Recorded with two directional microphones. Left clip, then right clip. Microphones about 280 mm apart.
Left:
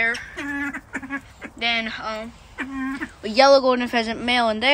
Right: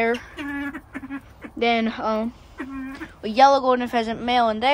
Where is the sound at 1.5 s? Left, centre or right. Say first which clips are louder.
Right 2 dB; centre.